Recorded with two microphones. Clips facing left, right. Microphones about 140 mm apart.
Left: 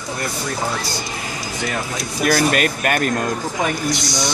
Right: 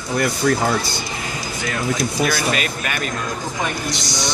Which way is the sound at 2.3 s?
50° left (ahead or behind).